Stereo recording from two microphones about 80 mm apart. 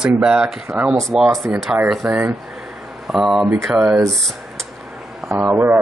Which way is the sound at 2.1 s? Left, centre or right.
Right.